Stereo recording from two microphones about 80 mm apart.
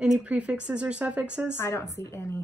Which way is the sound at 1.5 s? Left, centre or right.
Left.